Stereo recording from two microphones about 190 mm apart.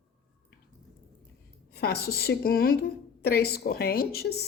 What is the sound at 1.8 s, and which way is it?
Speech, 55° left (ahead or behind).